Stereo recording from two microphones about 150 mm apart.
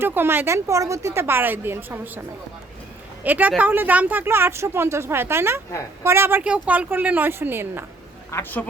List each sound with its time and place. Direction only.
0.0 s a woman's voice: 15° right (ahead or behind)
3.2 s a woman's voice: 10° right (ahead or behind)
8.3 s speech: 15° left (ahead or behind)